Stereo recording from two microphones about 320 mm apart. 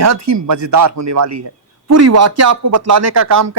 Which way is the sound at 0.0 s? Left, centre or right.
Right.